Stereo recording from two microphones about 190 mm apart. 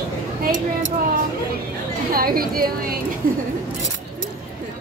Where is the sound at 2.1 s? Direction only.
50° right (ahead or behind).